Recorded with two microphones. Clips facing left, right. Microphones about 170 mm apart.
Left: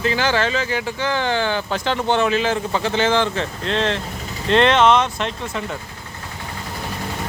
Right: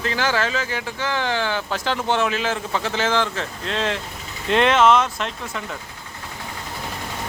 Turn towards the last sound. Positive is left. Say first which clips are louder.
# left 3 dB
turn(degrees=0)  # may be behind; listen again after turning